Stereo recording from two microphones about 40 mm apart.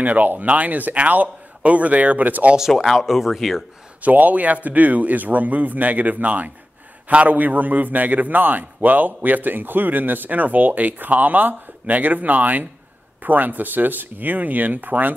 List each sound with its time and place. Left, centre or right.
0.0 s a man's voice: right
2.7 s speech: centre
3.0 s speech: centre
4.0 s a man's voice: right